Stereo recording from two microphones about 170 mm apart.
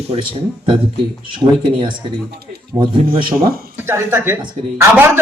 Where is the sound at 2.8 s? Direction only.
30° right (ahead or behind).